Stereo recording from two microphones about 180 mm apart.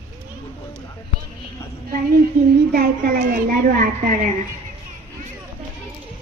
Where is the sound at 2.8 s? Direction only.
55° right (ahead or behind).